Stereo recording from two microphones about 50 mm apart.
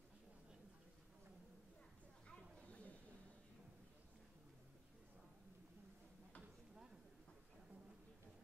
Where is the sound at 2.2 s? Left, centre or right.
Left.